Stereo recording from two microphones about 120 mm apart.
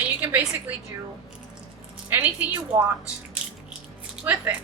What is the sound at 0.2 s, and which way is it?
Speech, 15° right (ahead or behind).